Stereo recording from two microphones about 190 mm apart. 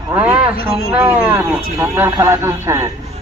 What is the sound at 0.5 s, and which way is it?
Speech, 50° left (ahead or behind).